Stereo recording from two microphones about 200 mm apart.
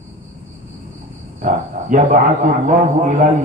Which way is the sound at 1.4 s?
40° right (ahead or behind).